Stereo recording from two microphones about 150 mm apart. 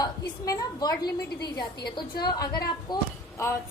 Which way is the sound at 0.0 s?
25° left (ahead or behind).